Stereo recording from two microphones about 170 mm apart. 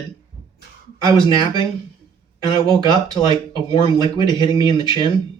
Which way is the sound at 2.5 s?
25° right (ahead or behind).